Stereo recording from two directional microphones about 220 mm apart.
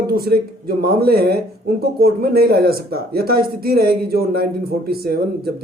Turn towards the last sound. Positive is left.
turn(degrees=-45)  # may be behind; listen again after turning